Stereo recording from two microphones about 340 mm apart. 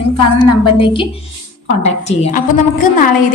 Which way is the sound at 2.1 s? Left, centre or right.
Left.